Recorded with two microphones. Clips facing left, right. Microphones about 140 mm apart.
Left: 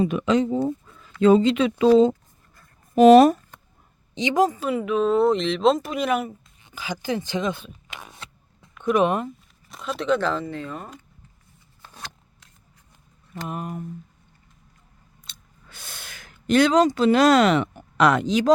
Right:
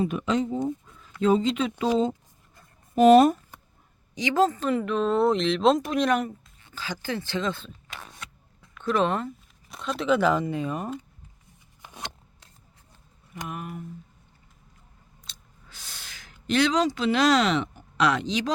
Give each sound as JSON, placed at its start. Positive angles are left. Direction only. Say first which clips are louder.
{"t": 0.0, "sound": "speech", "louder": "left 5 dB", "side_deg": 90}
{"t": 4.1, "sound": "speech", "louder": "left 2 dB", "side_deg": 20}
{"t": 6.6, "sound": "speech", "louder": "left 4 dB", "side_deg": 15}
{"t": 8.2, "sound": "zipper", "louder": "left 1 dB", "side_deg": 30}
{"t": 8.8, "sound": "speech", "louder": "left 4 dB", "side_deg": 15}
{"t": 9.6, "sound": "speech", "louder": "left 1 dB", "side_deg": 0}
{"t": 11.8, "sound": "a sound", "louder": "right 2 dB", "side_deg": -15}
{"t": 13.5, "sound": "speech", "louder": "left 5 dB", "side_deg": 40}
{"t": 15.3, "sound": "a sound", "louder": "left 2 dB", "side_deg": 55}